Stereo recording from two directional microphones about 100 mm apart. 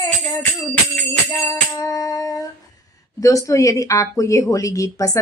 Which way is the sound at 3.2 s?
30° left (ahead or behind).